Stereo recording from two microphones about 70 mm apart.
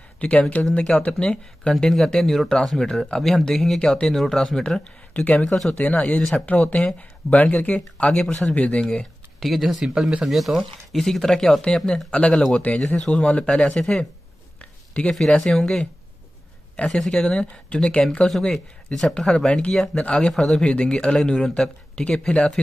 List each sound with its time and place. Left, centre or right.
0.2 s speech: centre
5.8 s speech: left
9.4 s speech: centre